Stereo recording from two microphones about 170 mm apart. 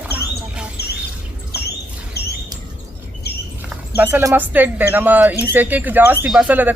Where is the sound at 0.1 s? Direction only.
10° right (ahead or behind).